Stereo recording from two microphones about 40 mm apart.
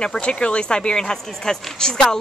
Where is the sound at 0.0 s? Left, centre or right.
Left.